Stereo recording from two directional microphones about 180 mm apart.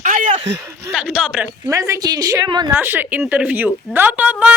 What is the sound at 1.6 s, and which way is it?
A woman's voice, 15° right (ahead or behind).